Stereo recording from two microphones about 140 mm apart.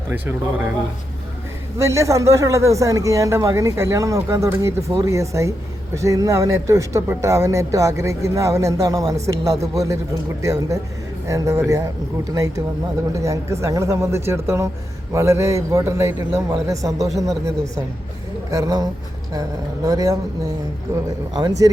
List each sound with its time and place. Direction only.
0.1 s speech: 15° right (ahead or behind)
1.8 s speech: 20° right (ahead or behind)